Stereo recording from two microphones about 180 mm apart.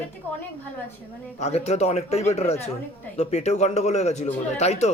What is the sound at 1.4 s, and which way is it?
Speech, 35° left (ahead or behind).